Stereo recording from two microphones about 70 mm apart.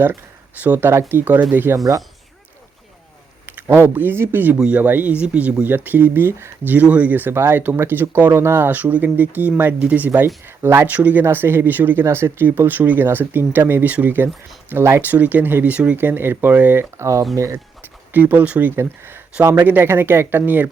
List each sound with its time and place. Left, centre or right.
0.6 s speech: right
1.7 s speech: right
3.4 s speech: right
4.6 s speech: right
14.7 s speech: right
15.0 s speech: right
17.0 s speech: right
18.1 s speech: right
18.8 s speech: right